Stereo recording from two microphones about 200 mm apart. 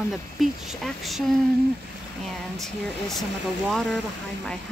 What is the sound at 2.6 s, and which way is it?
Speech, centre (ahead or behind).